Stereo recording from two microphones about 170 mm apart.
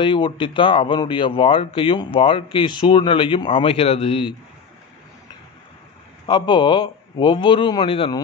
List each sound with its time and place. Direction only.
0.0 s speech: 30° left (ahead or behind)
6.2 s a man's voice: 25° left (ahead or behind)